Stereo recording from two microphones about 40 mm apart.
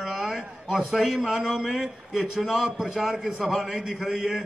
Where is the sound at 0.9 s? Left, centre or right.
Centre.